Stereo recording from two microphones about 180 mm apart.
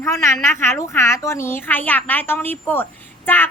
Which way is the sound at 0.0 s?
15° left (ahead or behind).